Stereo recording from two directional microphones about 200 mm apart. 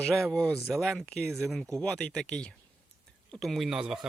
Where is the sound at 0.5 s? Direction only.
15° right (ahead or behind).